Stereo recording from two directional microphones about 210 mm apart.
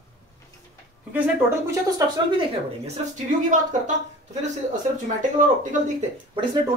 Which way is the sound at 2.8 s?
35° right (ahead or behind).